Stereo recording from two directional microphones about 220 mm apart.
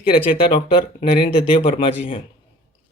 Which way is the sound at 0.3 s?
25° left (ahead or behind).